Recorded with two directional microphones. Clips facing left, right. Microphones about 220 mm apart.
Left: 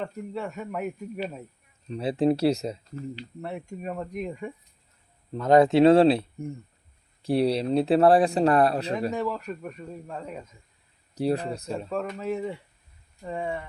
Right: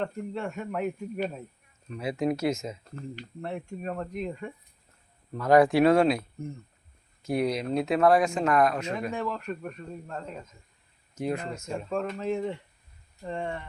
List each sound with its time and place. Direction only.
0.0 s speech: 5° left (ahead or behind)
1.9 s speech: 30° left (ahead or behind)
2.8 s speech: 50° right (ahead or behind)
3.4 s speech: 10° left (ahead or behind)
5.3 s speech: 25° left (ahead or behind)
9.1 s speech: 10° left (ahead or behind)
11.1 s speech: 35° left (ahead or behind)
11.9 s speech: 5° left (ahead or behind)